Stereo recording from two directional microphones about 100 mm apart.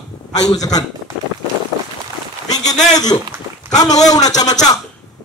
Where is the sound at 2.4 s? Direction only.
40° left (ahead or behind).